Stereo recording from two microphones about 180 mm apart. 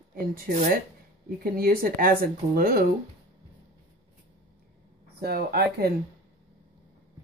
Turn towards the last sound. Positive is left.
turn(degrees=-60)  # may be behind; listen again after turning